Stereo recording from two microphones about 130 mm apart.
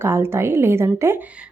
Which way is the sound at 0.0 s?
20° right (ahead or behind).